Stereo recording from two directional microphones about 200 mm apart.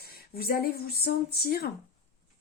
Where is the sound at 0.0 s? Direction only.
50° left (ahead or behind).